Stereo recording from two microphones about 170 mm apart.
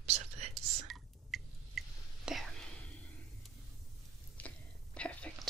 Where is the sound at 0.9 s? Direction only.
Centre (ahead or behind).